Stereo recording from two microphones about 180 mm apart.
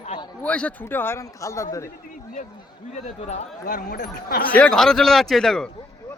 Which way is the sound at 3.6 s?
60° left (ahead or behind).